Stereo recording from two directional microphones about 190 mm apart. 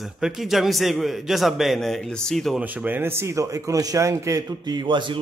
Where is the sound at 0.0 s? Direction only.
Centre (ahead or behind).